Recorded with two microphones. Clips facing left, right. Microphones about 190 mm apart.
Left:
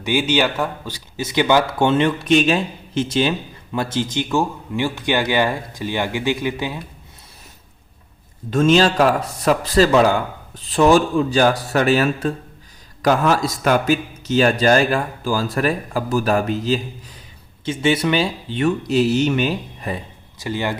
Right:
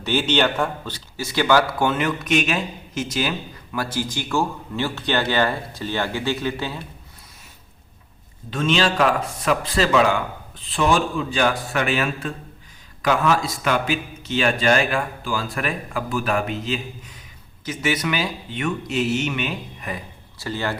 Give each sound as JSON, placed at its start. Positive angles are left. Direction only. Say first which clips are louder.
{"t": 0.0, "sound": "speech", "louder": "left 2 dB", "side_deg": 10}
{"t": 8.4, "sound": "a man's voice", "louder": "left 6 dB", "side_deg": 45}
{"t": 20.4, "sound": "speech", "louder": "left 3 dB", "side_deg": 15}